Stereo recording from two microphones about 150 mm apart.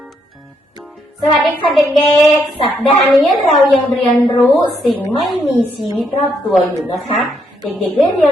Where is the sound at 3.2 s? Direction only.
Centre (ahead or behind).